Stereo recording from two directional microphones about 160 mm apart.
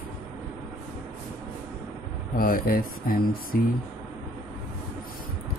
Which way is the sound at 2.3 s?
65° left (ahead or behind).